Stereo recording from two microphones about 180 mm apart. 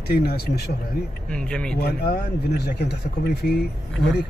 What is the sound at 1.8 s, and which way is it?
Speech, 65° left (ahead or behind).